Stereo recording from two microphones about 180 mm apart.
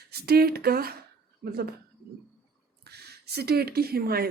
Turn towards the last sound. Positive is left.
turn(degrees=-55)  # may be behind; listen again after turning